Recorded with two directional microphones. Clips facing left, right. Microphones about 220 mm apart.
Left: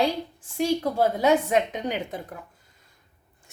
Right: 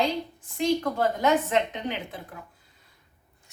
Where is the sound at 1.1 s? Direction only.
10° left (ahead or behind).